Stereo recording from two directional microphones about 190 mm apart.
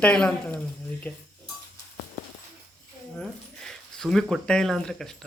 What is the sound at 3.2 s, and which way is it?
Speech, 5° left (ahead or behind).